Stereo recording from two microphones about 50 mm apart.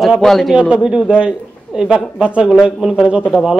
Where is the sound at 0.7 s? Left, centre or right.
Centre.